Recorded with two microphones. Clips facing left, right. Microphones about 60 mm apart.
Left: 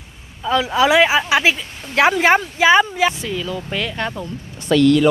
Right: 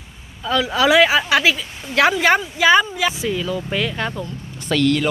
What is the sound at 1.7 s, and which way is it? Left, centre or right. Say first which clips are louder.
Speech: right 2 dB; centre.